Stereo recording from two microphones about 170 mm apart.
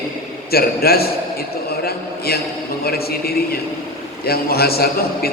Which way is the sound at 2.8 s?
65° left (ahead or behind).